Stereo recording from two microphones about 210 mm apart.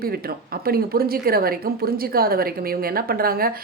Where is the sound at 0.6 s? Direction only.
45° right (ahead or behind).